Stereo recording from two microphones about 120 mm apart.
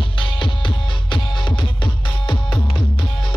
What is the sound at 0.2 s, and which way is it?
Music, 45° left (ahead or behind).